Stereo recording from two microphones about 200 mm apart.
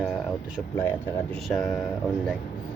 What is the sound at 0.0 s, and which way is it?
Air conditioning, centre (ahead or behind).